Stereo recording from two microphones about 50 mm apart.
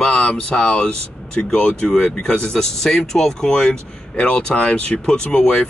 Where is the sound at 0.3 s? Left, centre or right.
Left.